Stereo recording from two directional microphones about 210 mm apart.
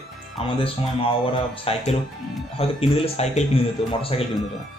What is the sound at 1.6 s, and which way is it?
A man's voice, 30° left (ahead or behind).